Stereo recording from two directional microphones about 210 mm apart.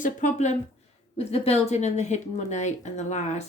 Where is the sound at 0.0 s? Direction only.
35° left (ahead or behind).